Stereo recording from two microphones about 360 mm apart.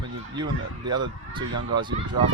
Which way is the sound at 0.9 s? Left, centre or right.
Centre.